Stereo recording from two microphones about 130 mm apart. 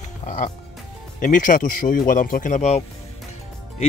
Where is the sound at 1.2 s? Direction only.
90° left; by 2.8 s 65° left (ahead or behind).